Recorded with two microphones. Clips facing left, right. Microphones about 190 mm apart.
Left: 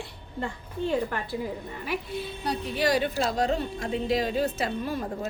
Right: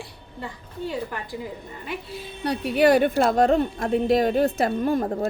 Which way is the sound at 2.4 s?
65° right (ahead or behind).